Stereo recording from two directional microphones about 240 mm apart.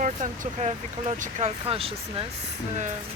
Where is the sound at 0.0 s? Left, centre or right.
Right.